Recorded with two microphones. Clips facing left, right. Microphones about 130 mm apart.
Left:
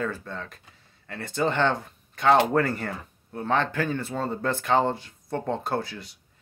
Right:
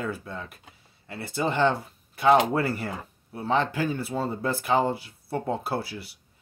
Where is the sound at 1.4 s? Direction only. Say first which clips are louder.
Even; 70° left (ahead or behind).